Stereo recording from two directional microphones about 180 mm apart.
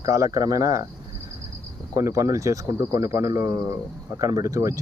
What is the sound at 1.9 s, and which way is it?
Speech, 15° right (ahead or behind).